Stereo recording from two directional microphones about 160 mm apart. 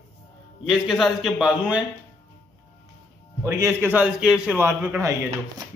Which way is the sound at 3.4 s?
15° right (ahead or behind).